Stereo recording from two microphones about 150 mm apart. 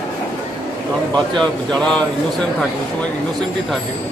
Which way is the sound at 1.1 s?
5° left (ahead or behind).